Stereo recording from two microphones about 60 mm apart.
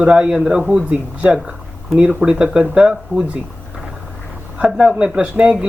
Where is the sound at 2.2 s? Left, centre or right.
Centre.